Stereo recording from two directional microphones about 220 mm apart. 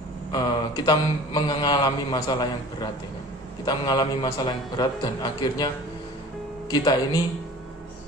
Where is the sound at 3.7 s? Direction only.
20° left (ahead or behind).